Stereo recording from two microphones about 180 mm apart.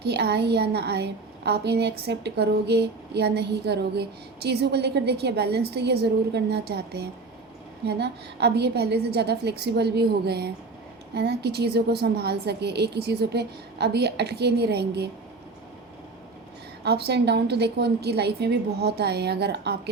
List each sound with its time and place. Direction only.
0.0 s a woman's voice: 65° right (ahead or behind)
16.8 s a woman's voice: 65° right (ahead or behind)